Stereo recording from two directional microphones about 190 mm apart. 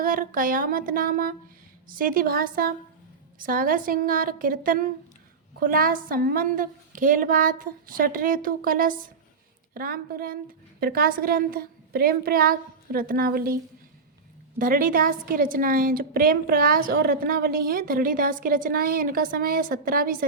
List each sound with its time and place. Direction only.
0.0 s a woman's voice: 45° right (ahead or behind)
14.6 s a woman's voice: 45° right (ahead or behind)